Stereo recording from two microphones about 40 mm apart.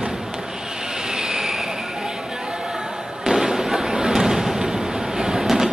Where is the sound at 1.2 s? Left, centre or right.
Centre.